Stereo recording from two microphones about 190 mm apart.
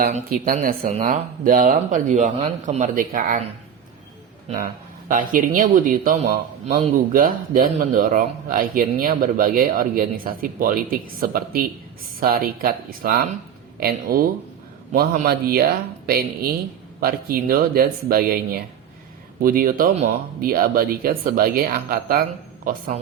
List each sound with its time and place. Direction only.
0.0 s a man's voice: 50° right (ahead or behind)
4.4 s a man's voice: 45° right (ahead or behind)